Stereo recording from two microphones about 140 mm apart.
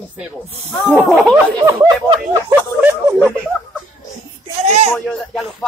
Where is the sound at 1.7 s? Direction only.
20° right (ahead or behind).